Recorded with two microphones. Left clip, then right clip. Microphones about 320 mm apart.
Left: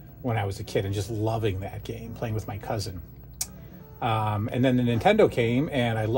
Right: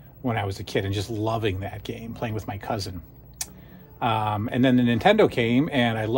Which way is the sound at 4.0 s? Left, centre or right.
Right.